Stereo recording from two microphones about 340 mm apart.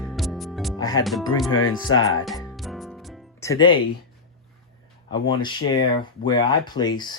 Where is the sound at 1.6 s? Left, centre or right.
Left.